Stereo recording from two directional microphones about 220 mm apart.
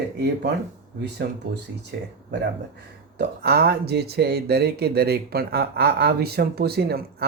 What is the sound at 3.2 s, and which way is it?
Speech, 45° right (ahead or behind).